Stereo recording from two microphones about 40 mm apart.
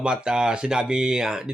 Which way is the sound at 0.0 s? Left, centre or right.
Right.